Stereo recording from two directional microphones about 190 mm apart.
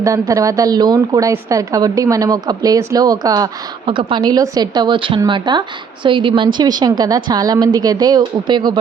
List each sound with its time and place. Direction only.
0.0 s a woman's voice: 15° right (ahead or behind)